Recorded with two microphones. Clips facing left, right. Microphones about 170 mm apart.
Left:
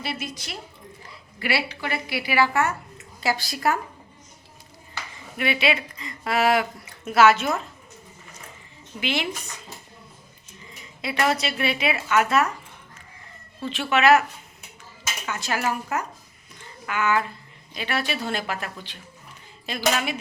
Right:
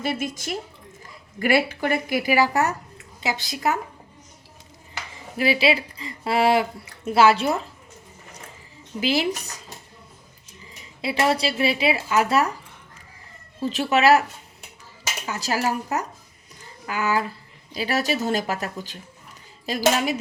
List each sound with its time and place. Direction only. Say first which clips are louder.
0.0 s a woman's voice: right 6 dB; 50° right (ahead or behind)
3.2 s speech: left 2 dB; 20° right (ahead or behind)
5.4 s speech: right 3 dB; 30° right (ahead or behind)
9.0 s speech: right 5 dB; 35° right (ahead or behind)
11.0 s speech: right 2 dB; 30° right (ahead or behind)
13.6 s speech: right 2 dB; 40° right (ahead or behind)
15.3 s speech: right 2 dB; 35° right (ahead or behind)
16.6 s a sound: even; 35° right (ahead or behind)
17.7 s speech: right 4 dB; 40° right (ahead or behind)
19.8 s speech: right 3 dB; 30° right (ahead or behind)